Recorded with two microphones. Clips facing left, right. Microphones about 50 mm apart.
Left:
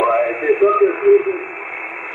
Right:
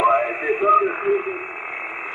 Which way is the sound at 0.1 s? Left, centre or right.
Centre.